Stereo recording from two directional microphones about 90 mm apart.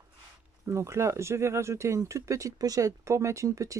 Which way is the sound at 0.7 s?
30° right (ahead or behind).